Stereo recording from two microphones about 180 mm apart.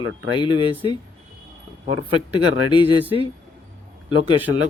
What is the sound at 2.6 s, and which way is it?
Speech, 25° left (ahead or behind).